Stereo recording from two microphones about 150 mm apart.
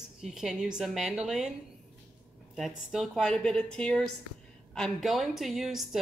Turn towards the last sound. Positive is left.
turn(degrees=0)  # may be behind; listen again after turning